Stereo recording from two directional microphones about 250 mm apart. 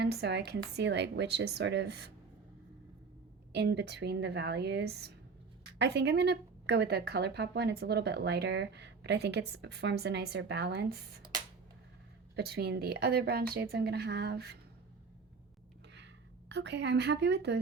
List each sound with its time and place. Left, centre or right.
0.0 s a woman's voice: right
3.5 s speech: right
12.5 s speech: right
16.5 s speech: right